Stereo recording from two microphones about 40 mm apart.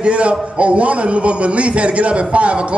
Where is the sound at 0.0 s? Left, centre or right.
Right.